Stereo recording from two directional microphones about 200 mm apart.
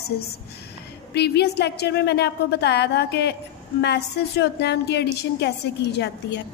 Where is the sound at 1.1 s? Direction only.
55° left (ahead or behind).